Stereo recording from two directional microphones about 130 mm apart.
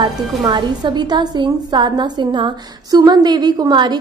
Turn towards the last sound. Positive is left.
turn(degrees=-35)  # may be behind; listen again after turning